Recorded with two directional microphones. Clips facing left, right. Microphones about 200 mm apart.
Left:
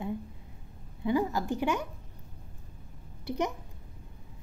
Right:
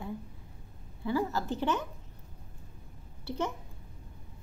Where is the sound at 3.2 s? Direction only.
15° left (ahead or behind).